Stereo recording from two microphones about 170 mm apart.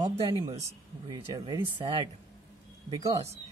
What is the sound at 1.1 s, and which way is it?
Speech, 20° right (ahead or behind).